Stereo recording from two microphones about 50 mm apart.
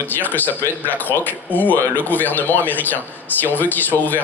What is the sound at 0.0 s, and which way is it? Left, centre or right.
A man's voice, left.